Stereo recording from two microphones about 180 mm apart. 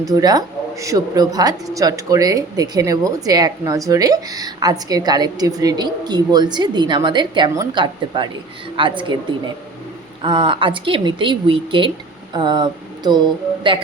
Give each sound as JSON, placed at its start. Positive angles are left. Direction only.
{"t": 0.0, "sound": "speech", "side_deg": -20}
{"t": 10.2, "sound": "speech", "side_deg": -25}